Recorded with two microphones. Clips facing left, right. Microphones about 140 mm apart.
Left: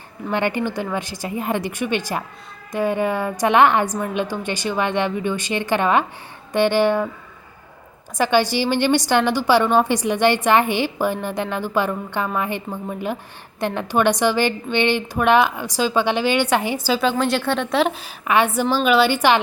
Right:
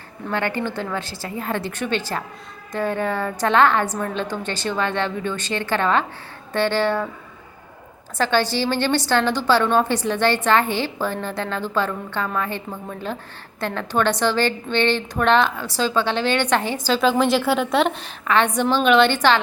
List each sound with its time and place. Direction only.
0.3 s a woman's voice: 15° left (ahead or behind)
8.2 s a woman's voice: 15° left (ahead or behind)